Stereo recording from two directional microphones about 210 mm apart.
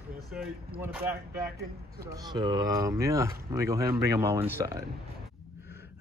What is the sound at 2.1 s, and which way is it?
Speech, 20° right (ahead or behind).